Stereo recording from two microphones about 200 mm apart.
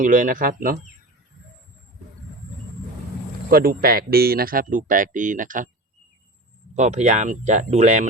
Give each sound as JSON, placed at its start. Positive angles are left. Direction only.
{"t": 0.0, "sound": "speech", "side_deg": -40}
{"t": 3.5, "sound": "speech", "side_deg": -50}
{"t": 6.7, "sound": "speech", "side_deg": -35}